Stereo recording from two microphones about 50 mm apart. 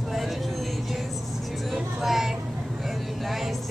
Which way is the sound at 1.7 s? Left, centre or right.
Centre.